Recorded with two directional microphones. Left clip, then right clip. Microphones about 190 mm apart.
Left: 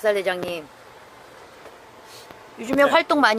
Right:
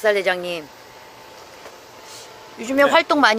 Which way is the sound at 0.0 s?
Centre (ahead or behind).